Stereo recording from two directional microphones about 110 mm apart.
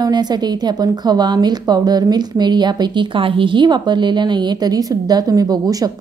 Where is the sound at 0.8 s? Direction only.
40° right (ahead or behind).